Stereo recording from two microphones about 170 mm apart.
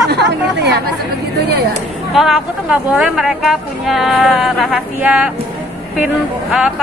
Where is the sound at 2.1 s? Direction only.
Centre (ahead or behind).